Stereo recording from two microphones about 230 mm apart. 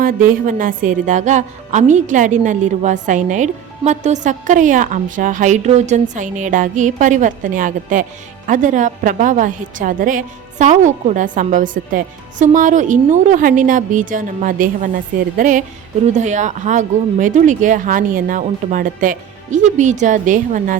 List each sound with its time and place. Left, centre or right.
0.0 s a woman's voice: right